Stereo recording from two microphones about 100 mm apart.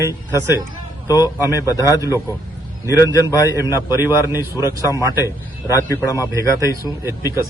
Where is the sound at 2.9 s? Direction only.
35° left (ahead or behind).